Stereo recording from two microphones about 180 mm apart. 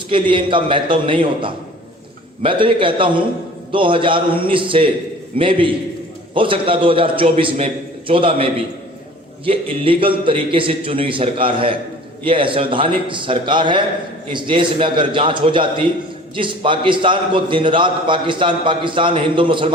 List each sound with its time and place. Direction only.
0.1 s a man's voice: 25° right (ahead or behind)
9.5 s a man's voice: 30° right (ahead or behind)